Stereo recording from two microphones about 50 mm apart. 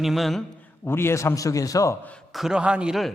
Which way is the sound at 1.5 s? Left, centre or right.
Left.